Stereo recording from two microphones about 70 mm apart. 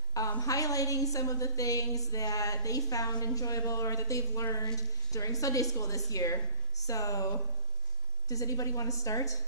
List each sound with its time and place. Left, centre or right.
0.4 s a woman's voice: left